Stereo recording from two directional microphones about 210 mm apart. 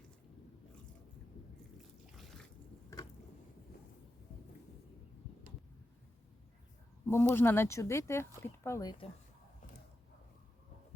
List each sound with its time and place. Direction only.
7.0 s a woman's voice: 10° left (ahead or behind)